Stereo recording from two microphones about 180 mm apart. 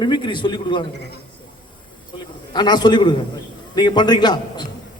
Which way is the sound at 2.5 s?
25° left (ahead or behind).